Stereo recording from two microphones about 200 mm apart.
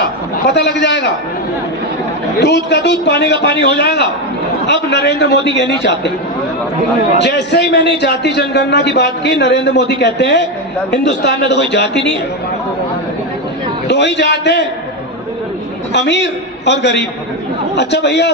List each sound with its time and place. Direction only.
0.5 s a man's voice: 60° left (ahead or behind)
2.3 s a man's voice: 60° left (ahead or behind)
7.2 s a man's voice: 60° left (ahead or behind)
13.8 s a man's voice: 60° left (ahead or behind)
15.9 s a man's voice: 60° left (ahead or behind)